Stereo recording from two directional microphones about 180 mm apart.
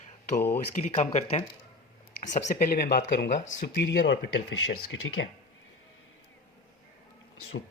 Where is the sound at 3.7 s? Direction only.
75° left (ahead or behind).